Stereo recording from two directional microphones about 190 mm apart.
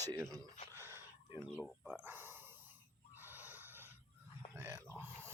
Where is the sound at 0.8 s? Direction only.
15° right (ahead or behind).